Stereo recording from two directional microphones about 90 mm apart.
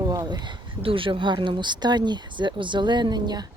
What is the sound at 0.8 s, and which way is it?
Speech, 80° right.